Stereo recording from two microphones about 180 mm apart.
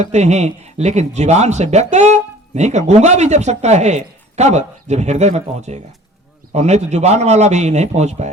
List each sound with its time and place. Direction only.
0.0 s speech: 40° right (ahead or behind)